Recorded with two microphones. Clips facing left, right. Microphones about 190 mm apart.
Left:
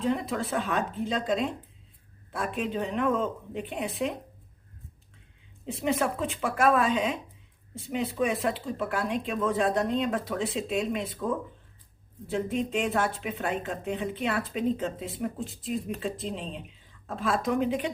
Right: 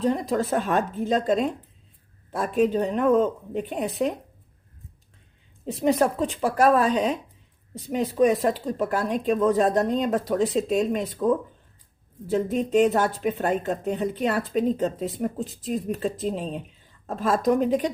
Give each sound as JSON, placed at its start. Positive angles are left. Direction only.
{"t": 0.0, "sound": "a woman's voice", "side_deg": -40}
{"t": 5.6, "sound": "a woman's voice", "side_deg": -40}
{"t": 12.3, "sound": "a woman's voice", "side_deg": -40}